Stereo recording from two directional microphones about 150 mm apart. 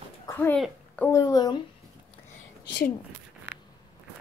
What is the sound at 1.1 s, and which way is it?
Speech, 25° left (ahead or behind).